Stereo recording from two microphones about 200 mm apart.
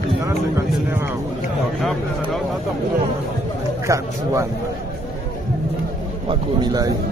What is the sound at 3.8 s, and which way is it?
Speech, 15° right (ahead or behind).